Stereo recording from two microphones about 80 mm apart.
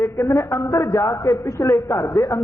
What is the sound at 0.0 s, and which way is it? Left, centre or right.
A man's voice, left.